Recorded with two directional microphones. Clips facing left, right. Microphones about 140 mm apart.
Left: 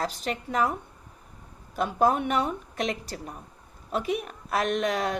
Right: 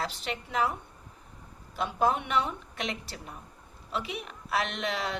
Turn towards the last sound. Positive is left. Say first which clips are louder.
# left 7 dB
turn(degrees=45)  # may be behind; listen again after turning